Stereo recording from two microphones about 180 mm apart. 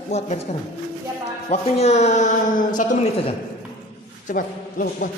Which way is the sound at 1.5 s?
40° left (ahead or behind).